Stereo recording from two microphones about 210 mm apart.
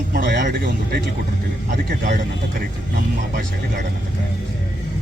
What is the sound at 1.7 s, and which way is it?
Speech, 35° right (ahead or behind).